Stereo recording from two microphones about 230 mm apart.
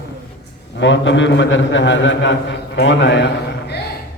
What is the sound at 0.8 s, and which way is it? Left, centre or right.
A man's voice, left.